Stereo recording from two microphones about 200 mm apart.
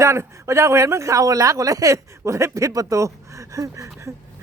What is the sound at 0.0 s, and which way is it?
Speech, 15° right (ahead or behind).